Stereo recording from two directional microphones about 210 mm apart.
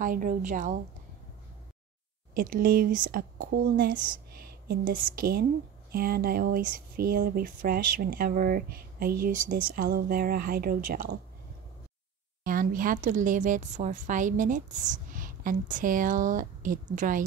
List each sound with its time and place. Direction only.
0.0 s a woman's voice: 40° right (ahead or behind)
2.3 s a woman's voice: 40° right (ahead or behind)
12.4 s a woman's voice: 40° right (ahead or behind)